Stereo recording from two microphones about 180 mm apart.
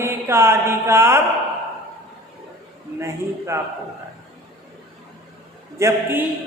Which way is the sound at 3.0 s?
15° right (ahead or behind).